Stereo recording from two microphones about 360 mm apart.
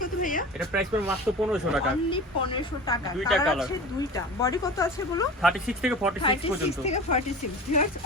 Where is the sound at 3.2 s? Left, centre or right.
Centre.